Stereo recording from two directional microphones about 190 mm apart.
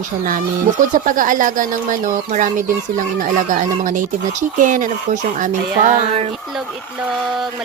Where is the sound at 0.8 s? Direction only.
45° right (ahead or behind).